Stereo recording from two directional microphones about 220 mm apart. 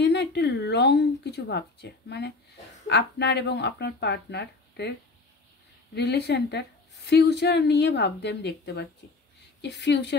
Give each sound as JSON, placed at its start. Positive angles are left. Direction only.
{"t": 0.0, "sound": "a woman's voice", "side_deg": 50}
{"t": 5.9, "sound": "a woman's voice", "side_deg": 50}